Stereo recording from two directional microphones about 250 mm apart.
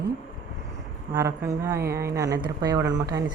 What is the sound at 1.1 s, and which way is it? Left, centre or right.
Speech, centre.